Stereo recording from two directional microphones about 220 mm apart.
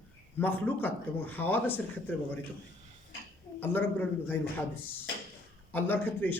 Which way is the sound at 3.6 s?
10° left (ahead or behind).